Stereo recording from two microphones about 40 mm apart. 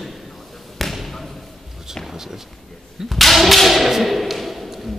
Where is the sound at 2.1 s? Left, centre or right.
Centre.